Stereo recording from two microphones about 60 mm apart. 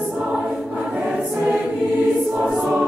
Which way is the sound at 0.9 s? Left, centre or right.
Centre.